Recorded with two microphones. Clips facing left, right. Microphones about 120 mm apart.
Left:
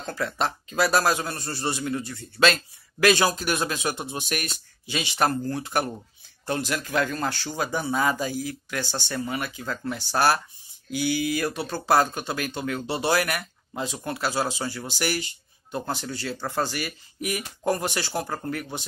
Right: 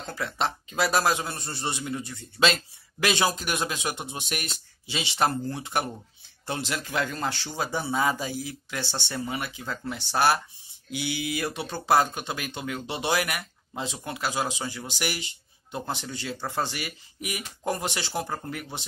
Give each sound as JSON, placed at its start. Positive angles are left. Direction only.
{"t": 0.0, "sound": "speech", "side_deg": -20}